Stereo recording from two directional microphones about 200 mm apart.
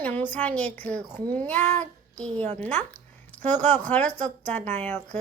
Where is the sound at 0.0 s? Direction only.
10° left (ahead or behind).